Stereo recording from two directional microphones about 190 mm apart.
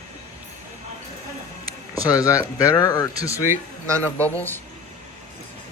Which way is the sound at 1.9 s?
20° left (ahead or behind).